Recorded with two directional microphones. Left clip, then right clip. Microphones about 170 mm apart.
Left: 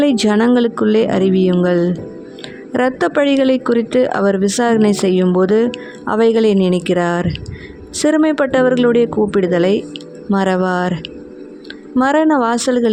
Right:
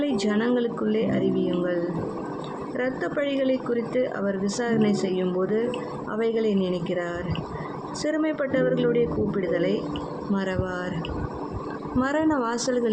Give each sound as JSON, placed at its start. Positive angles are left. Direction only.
{"t": 0.0, "sound": "speech", "side_deg": 60}
{"t": 11.9, "sound": "speech", "side_deg": 55}